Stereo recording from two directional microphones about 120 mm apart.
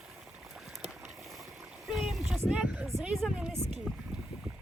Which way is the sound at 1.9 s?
Centre (ahead or behind).